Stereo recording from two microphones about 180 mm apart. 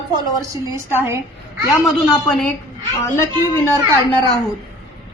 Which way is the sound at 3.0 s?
15° left (ahead or behind).